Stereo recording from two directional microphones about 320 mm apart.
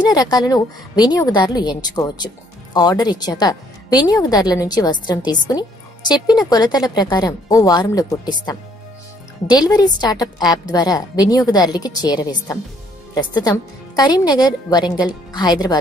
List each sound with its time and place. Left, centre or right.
0.0 s a woman's voice: centre